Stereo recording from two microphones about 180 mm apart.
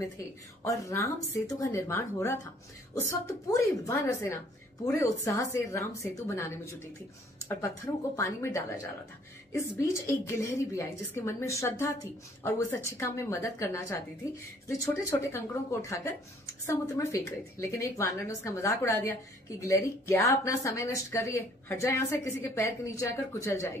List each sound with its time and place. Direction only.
0.7 s a woman's voice: 15° left (ahead or behind)